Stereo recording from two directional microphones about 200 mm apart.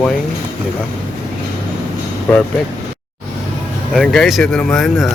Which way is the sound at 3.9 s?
Centre (ahead or behind).